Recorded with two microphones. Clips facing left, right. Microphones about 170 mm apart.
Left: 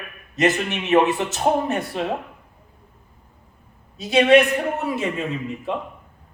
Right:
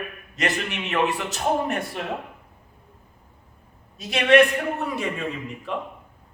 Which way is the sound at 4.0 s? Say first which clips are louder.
Left 2 dB; 25° left (ahead or behind).